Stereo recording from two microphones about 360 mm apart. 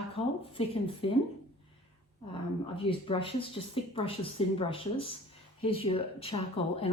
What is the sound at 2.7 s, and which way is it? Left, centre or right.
Speech, centre.